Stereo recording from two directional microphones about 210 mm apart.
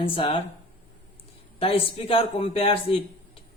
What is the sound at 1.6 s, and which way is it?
A man's voice, 25° left (ahead or behind).